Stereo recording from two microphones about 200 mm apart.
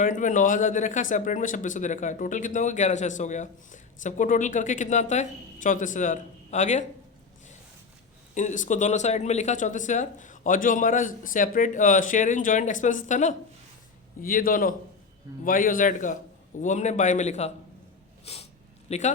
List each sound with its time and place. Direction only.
0.0 s speech: 40° left (ahead or behind)
8.4 s a man's voice: 40° left (ahead or behind)